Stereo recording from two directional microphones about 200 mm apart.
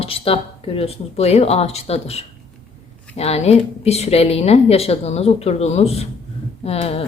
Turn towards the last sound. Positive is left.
turn(degrees=30)  # may be behind; listen again after turning